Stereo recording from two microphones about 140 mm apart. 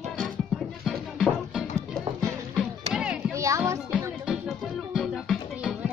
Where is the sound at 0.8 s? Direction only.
Centre (ahead or behind).